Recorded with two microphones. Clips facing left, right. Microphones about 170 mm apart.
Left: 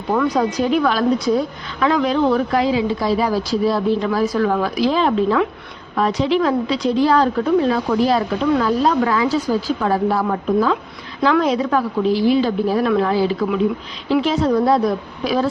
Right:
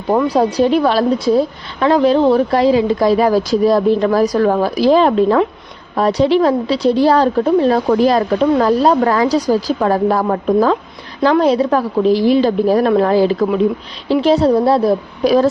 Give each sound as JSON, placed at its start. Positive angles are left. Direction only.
{"t": 0.1, "sound": "a woman's voice", "side_deg": -30}